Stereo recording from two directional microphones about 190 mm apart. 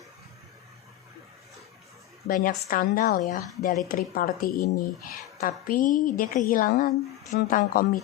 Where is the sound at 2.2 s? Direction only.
50° left (ahead or behind).